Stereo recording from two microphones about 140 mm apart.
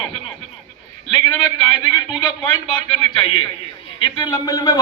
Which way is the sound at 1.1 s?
35° left (ahead or behind).